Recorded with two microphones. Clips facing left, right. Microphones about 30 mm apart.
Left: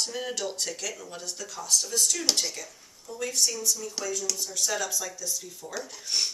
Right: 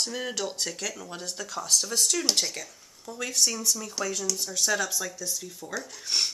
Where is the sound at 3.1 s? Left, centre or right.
Right.